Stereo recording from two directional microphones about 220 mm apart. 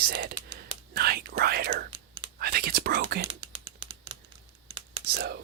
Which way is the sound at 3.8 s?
25° right (ahead or behind).